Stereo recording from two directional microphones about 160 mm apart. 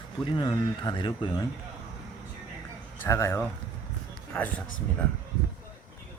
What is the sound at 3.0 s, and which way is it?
Speech, 20° left (ahead or behind).